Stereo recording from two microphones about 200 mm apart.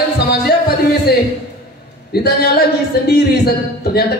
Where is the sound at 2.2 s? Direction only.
50° left (ahead or behind).